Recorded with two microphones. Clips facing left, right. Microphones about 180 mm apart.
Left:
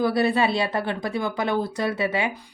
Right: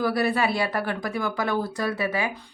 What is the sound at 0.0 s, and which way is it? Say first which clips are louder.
A woman's voice: left 2 dB; 25° left (ahead or behind).